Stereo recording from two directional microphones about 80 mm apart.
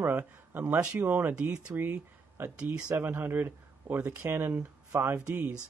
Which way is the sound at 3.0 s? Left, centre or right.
Right.